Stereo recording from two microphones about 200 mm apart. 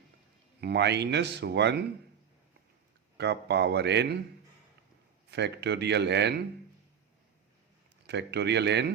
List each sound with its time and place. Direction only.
0.6 s speech: 55° right (ahead or behind)
3.2 s speech: 60° right (ahead or behind)
5.3 s speech: 60° right (ahead or behind)
8.0 s speech: 60° right (ahead or behind)